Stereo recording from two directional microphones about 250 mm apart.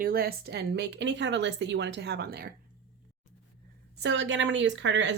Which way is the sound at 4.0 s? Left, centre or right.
Right.